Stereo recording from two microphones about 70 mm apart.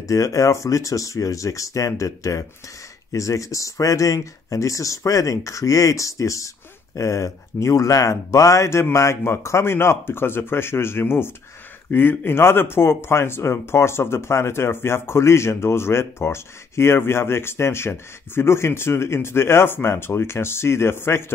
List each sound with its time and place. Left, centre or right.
0.0 s speech: left